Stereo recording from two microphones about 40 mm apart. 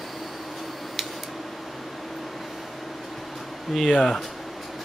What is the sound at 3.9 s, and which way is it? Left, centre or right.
Speech, centre.